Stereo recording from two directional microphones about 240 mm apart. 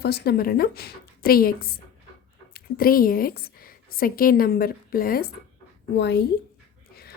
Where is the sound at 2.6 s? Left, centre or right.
Left.